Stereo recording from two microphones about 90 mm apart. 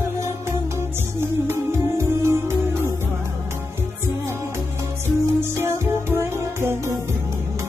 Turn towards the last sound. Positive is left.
turn(degrees=-25)  # may be behind; listen again after turning